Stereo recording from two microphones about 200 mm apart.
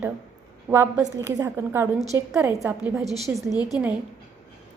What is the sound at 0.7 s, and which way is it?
A woman's voice, 10° right (ahead or behind).